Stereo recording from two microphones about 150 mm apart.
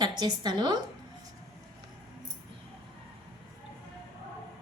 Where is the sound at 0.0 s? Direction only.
30° right (ahead or behind).